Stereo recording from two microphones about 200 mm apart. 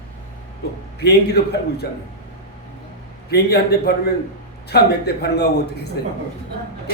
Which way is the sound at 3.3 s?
55° left (ahead or behind).